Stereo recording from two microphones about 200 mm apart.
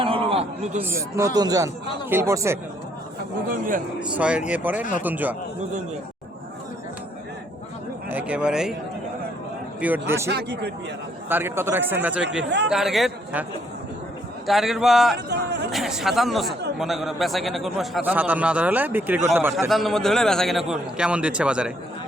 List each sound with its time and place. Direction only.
0.0 s a sound: 25° right (ahead or behind)
0.8 s a man's voice: 10° right (ahead or behind)
4.1 s a man's voice: 5° right (ahead or behind)
8.1 s a man's voice: 5° right (ahead or behind)
9.8 s a man's voice: 10° right (ahead or behind)
10.2 s a man's voice: 55° right (ahead or behind)
11.3 s a man's voice: 10° right (ahead or behind)
14.4 s a man's voice: centre (ahead or behind)
15.3 s a sound: 55° right (ahead or behind)
15.7 s a man's voice: centre (ahead or behind)
19.5 s a man's voice: centre (ahead or behind)